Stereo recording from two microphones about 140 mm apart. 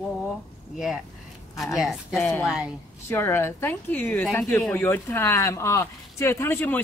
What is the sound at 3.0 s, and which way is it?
Speech, 15° left (ahead or behind).